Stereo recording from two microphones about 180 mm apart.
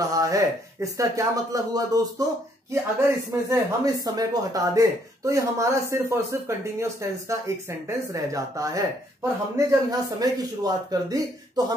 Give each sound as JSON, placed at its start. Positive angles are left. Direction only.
{"t": 0.1, "sound": "speech", "side_deg": -20}